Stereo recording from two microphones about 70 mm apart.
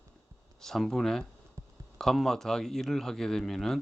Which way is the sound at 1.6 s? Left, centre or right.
Right.